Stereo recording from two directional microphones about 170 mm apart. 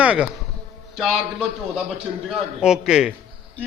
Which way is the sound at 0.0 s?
5° right (ahead or behind).